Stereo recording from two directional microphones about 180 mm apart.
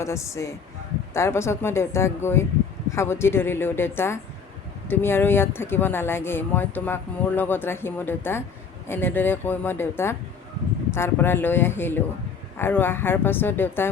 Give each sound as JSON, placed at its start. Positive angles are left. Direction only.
{"t": 0.0, "sound": "speech", "side_deg": 15}